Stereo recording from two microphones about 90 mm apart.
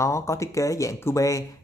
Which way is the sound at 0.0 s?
30° left (ahead or behind).